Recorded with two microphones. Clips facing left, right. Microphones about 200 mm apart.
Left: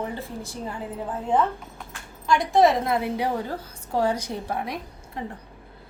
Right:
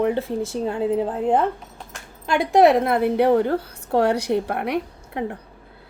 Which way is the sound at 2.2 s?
60° right (ahead or behind).